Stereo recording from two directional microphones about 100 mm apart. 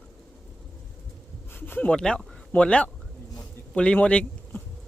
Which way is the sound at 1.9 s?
10° left (ahead or behind).